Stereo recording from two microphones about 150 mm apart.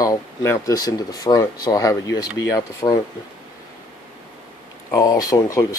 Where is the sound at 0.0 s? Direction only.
20° left (ahead or behind).